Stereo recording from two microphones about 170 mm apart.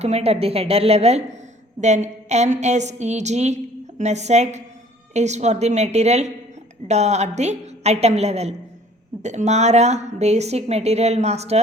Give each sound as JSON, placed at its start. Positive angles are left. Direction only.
{"t": 0.0, "sound": "a woman's voice", "side_deg": -40}